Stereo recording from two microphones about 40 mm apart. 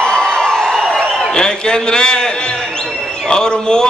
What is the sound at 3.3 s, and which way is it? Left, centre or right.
Speech, centre.